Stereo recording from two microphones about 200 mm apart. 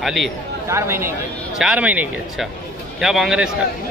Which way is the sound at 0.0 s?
Centre (ahead or behind).